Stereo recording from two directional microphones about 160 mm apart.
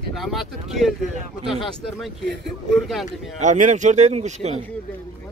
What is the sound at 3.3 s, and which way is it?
Speech, 50° right (ahead or behind).